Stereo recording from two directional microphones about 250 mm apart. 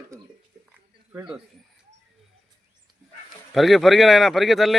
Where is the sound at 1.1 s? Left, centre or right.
Centre.